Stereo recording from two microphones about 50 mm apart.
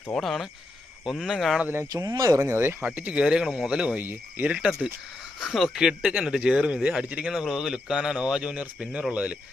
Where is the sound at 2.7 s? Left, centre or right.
Right.